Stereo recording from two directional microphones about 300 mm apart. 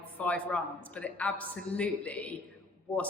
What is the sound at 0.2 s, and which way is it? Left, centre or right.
A woman's voice, centre.